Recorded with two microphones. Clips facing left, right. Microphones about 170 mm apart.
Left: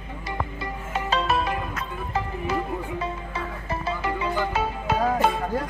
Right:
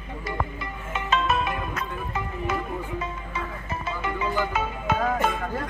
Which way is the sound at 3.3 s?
30° left (ahead or behind).